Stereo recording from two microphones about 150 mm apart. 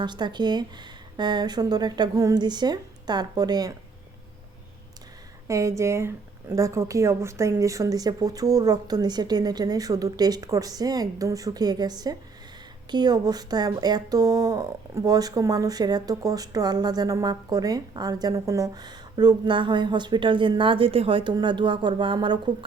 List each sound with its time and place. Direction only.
0.0 s speech: 30° right (ahead or behind)
5.5 s speech: 20° right (ahead or behind)